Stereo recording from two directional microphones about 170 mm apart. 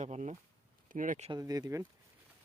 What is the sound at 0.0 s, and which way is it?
Speech, 45° right (ahead or behind).